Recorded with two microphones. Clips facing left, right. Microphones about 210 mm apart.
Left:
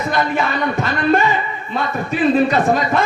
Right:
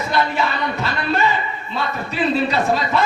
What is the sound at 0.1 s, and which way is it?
A man's voice, 50° left (ahead or behind).